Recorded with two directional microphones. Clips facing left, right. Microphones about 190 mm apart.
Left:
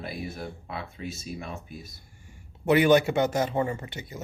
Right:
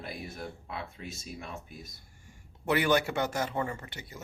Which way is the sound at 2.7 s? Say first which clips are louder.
Left 7 dB; 20° left (ahead or behind).